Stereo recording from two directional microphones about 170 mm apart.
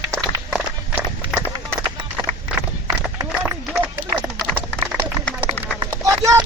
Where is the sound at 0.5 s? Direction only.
10° right (ahead or behind).